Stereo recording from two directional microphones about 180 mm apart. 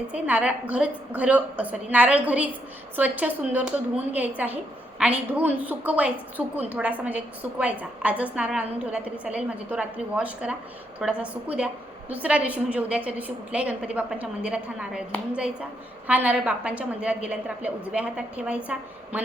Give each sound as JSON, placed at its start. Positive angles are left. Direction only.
{"t": 0.1, "sound": "a woman's voice", "side_deg": -5}
{"t": 16.0, "sound": "a woman's voice", "side_deg": -10}